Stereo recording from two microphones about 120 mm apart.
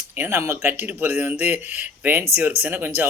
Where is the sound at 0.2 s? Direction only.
20° right (ahead or behind).